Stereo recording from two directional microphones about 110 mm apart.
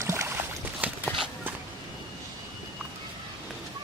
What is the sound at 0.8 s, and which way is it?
Walk, 15° right (ahead or behind).